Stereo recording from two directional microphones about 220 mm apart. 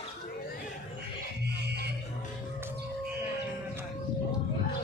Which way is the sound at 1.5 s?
50° right (ahead or behind).